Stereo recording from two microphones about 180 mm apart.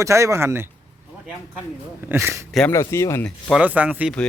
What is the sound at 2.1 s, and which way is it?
Speech, 15° right (ahead or behind).